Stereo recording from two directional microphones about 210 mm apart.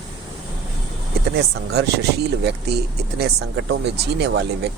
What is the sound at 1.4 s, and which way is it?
Speech, 50° right (ahead or behind).